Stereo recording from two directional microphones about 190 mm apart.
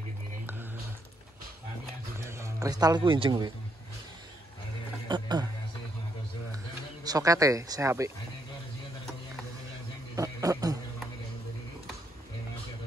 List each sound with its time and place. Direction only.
2.1 s speech: 15° right (ahead or behind)
5.0 s speech: 20° right (ahead or behind)
7.1 s speech: 20° right (ahead or behind)
10.1 s a man's voice: 15° right (ahead or behind)